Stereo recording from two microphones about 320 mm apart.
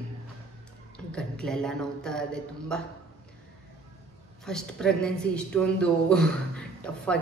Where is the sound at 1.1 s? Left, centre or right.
Centre.